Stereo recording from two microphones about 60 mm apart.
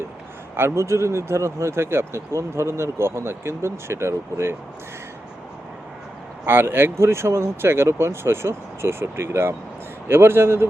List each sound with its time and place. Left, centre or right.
0.5 s speech: right
6.4 s speech: right